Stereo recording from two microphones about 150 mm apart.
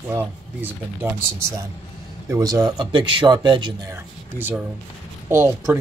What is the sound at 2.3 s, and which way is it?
Speech, 25° right (ahead or behind).